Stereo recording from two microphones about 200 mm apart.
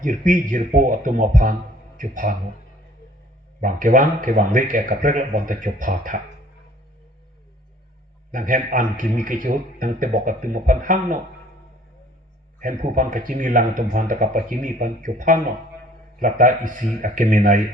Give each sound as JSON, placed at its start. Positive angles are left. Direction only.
{"t": 0.0, "sound": "a man's voice", "side_deg": -40}
{"t": 3.6, "sound": "a man's voice", "side_deg": -40}
{"t": 8.3, "sound": "a man's voice", "side_deg": -40}
{"t": 12.5, "sound": "a man's voice", "side_deg": -40}